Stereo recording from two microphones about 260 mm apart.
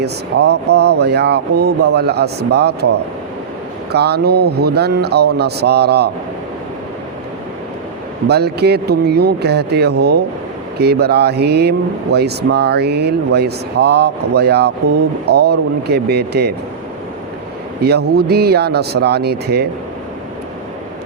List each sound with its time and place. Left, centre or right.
0.0 s speech: right
3.9 s speech: right
8.3 s speech: right
17.8 s speech: right